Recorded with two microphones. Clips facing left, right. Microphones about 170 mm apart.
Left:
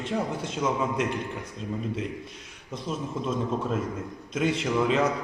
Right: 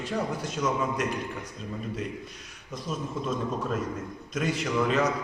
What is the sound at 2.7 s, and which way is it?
A man's voice, 25° left (ahead or behind).